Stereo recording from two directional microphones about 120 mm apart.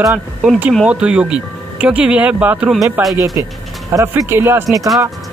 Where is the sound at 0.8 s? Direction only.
10° right (ahead or behind).